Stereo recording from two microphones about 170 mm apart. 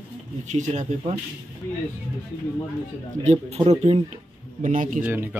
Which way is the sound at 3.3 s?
40° right (ahead or behind).